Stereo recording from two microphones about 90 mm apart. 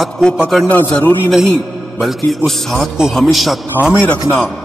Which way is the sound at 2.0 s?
5° left (ahead or behind).